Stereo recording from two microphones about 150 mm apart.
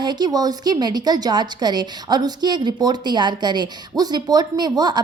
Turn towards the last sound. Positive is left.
turn(degrees=-30)  # may be behind; listen again after turning